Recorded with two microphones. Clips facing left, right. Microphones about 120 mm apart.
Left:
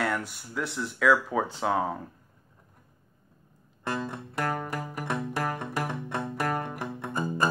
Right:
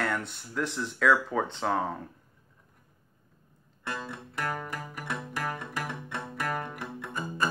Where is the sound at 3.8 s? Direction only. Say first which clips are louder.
Left 5 dB; 40° left (ahead or behind).